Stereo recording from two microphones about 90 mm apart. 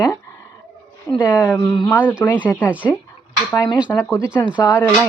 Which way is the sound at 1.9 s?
20° left (ahead or behind).